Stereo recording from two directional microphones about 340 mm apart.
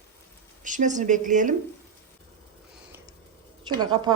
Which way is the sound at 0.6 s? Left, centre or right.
Right.